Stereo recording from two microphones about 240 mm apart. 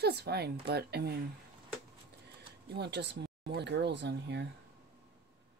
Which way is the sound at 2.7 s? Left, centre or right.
Right.